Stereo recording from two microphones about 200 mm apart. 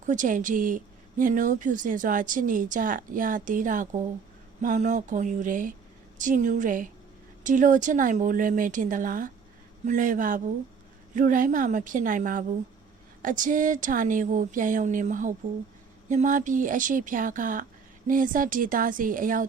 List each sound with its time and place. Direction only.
0.0 s a woman's voice: 40° right (ahead or behind)